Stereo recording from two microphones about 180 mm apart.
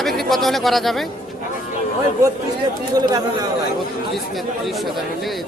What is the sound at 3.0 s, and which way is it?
Speech, 20° right (ahead or behind).